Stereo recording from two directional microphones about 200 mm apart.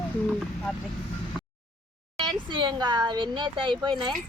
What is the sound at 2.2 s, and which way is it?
Speech, 25° right (ahead or behind).